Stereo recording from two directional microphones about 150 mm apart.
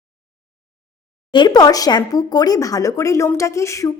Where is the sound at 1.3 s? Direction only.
25° left (ahead or behind).